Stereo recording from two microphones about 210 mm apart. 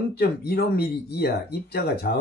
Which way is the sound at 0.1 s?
50° left (ahead or behind).